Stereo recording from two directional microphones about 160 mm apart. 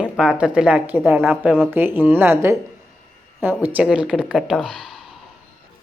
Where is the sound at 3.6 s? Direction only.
10° right (ahead or behind).